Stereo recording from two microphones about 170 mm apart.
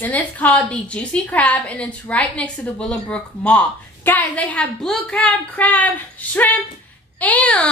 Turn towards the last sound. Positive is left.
turn(degrees=10)  # may be behind; listen again after turning